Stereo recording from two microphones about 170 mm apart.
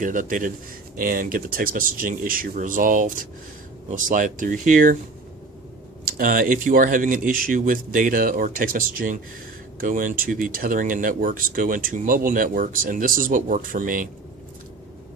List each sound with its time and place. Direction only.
0.0 s speech: 50° right (ahead or behind)
6.1 s speech: 55° right (ahead or behind)